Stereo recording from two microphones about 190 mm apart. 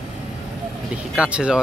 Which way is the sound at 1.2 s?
5° right (ahead or behind).